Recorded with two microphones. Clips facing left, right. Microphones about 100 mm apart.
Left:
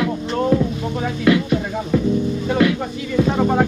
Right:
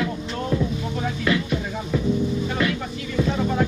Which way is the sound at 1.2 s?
55° left (ahead or behind).